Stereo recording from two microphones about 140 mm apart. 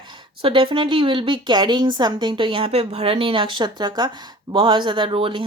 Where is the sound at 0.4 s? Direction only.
40° right (ahead or behind).